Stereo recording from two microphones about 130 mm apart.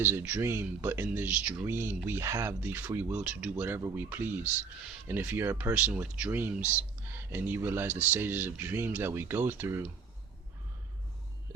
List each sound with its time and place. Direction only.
0.0 s speech: 20° right (ahead or behind)
3.2 s speech: 5° right (ahead or behind)